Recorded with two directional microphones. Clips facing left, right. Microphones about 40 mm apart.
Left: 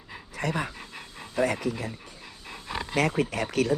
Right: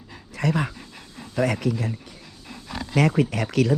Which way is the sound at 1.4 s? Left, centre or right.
Right.